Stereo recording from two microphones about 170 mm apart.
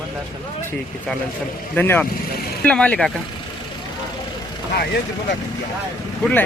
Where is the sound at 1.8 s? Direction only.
10° left (ahead or behind).